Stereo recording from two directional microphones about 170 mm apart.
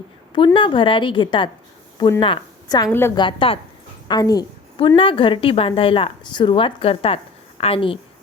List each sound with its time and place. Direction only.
0.3 s a woman's voice: 30° left (ahead or behind)